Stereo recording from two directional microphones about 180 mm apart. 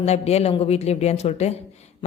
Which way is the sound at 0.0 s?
35° left (ahead or behind).